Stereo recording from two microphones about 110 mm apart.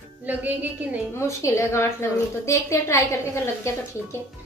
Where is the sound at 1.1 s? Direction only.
25° left (ahead or behind).